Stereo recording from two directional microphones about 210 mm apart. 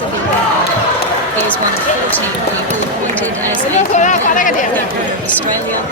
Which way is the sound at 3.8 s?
35° left (ahead or behind).